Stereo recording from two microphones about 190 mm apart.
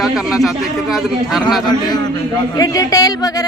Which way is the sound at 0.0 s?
Centre (ahead or behind).